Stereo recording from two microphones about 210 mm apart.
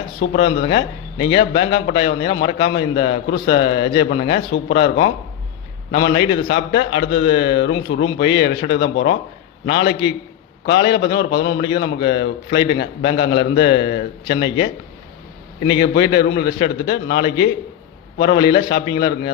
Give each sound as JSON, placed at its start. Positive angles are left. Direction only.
{"t": 0.2, "sound": "a man's voice", "side_deg": 60}
{"t": 15.7, "sound": "a man's voice", "side_deg": 55}